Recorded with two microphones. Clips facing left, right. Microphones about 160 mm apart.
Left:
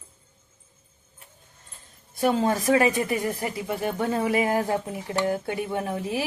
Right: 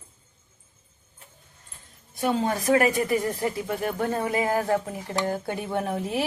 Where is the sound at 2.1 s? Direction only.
25° left (ahead or behind).